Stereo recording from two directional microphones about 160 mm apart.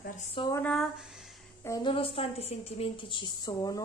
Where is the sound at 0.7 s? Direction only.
Centre (ahead or behind).